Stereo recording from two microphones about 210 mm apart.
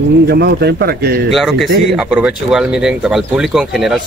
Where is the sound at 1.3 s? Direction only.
Centre (ahead or behind).